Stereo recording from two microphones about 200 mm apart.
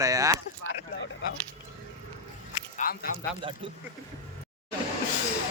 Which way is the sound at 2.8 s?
40° left (ahead or behind).